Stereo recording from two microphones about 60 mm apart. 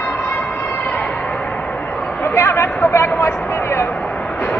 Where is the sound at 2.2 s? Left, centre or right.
Left.